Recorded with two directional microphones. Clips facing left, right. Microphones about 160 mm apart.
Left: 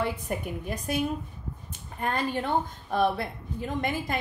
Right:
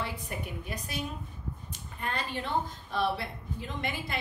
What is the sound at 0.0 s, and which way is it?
A woman's voice, 50° left (ahead or behind).